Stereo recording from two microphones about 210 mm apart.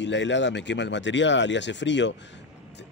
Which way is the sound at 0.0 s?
60° left (ahead or behind).